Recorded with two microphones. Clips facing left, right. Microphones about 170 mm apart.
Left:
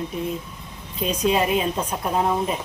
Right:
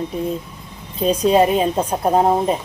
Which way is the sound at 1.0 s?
35° right (ahead or behind).